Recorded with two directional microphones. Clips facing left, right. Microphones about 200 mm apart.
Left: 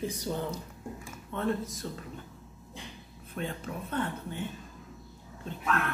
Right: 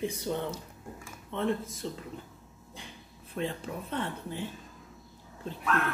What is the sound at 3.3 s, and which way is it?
Speech, 30° right (ahead or behind).